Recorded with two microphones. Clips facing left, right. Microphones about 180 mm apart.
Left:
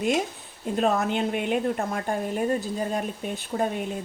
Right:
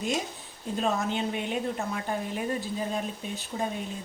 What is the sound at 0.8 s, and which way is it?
A woman's voice, 60° left (ahead or behind).